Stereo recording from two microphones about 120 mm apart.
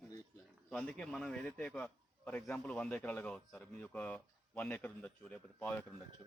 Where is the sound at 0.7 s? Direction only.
10° left (ahead or behind).